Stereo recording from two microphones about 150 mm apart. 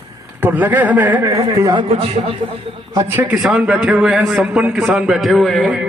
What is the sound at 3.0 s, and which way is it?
A man's voice, 10° right (ahead or behind).